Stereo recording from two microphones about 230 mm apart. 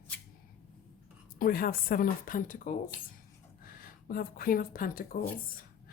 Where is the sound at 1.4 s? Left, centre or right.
Left.